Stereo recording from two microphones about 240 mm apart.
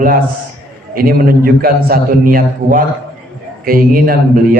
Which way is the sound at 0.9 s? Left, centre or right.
Right.